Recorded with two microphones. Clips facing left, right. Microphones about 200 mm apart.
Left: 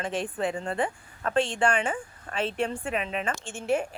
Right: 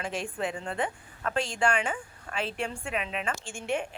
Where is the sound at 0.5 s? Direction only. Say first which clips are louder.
Left 3 dB; 40° left (ahead or behind).